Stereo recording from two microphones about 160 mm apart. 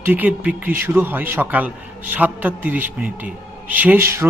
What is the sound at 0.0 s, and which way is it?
A man's voice, 10° right (ahead or behind).